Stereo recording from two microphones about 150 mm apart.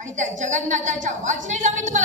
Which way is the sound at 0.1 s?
55° right (ahead or behind).